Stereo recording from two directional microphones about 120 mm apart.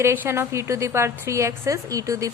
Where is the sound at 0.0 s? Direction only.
20° right (ahead or behind).